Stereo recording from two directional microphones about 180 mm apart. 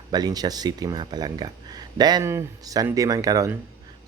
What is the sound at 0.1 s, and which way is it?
Speech, 20° right (ahead or behind).